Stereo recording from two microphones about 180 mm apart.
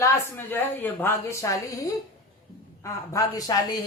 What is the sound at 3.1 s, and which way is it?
Speech, 20° left (ahead or behind).